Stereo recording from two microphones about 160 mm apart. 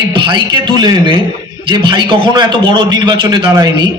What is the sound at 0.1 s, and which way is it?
A man's voice, 30° right (ahead or behind).